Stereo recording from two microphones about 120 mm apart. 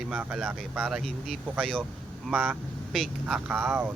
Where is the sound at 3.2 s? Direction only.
10° right (ahead or behind).